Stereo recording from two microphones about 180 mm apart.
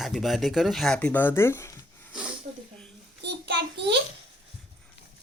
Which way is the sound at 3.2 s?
70° right (ahead or behind).